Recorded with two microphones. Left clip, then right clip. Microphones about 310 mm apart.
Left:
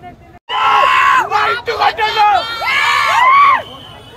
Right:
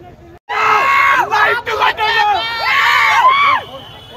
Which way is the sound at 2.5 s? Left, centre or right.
Centre.